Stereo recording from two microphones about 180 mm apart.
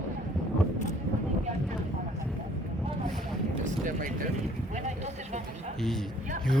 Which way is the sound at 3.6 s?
45° right (ahead or behind).